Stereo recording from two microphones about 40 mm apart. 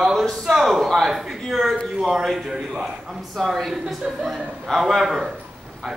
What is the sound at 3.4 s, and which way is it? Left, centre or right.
Speech, centre.